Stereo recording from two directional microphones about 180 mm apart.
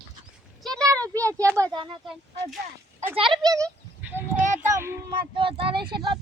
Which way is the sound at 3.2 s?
25° right (ahead or behind).